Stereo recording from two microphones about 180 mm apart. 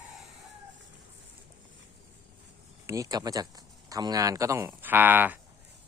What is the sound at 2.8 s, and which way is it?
Speech, 15° right (ahead or behind).